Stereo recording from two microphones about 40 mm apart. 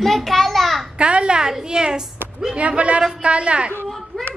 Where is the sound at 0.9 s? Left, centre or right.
Right.